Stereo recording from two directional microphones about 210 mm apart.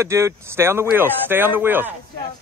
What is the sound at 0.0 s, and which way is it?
Speech, 15° right (ahead or behind).